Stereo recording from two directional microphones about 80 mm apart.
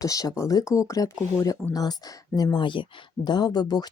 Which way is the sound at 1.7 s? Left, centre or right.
Left.